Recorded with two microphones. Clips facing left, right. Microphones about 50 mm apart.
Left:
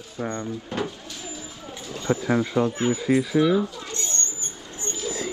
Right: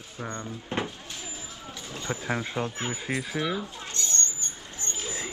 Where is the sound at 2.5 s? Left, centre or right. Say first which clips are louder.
Left 8 dB; left.